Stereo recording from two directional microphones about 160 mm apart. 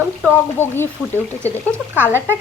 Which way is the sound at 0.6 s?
15° left (ahead or behind).